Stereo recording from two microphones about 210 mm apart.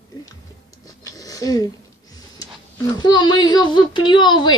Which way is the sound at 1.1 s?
15° left (ahead or behind).